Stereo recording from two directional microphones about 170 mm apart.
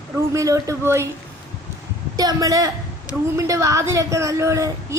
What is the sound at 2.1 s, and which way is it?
A woman's voice, 20° right (ahead or behind).